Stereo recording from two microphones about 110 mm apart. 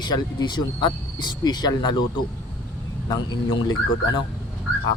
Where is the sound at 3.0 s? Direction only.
40° left (ahead or behind).